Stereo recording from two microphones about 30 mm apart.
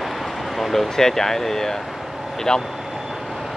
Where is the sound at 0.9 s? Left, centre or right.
Centre.